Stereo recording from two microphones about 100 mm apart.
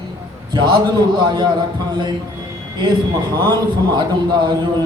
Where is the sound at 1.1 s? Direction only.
50° right (ahead or behind).